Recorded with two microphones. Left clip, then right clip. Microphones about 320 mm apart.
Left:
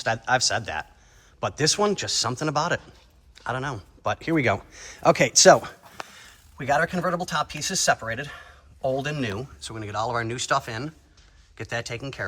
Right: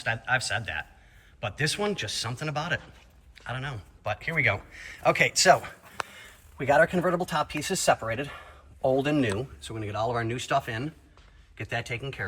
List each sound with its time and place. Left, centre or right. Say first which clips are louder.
0.0 s speech: left 5 dB; centre
6.1 s speech: right 2 dB; centre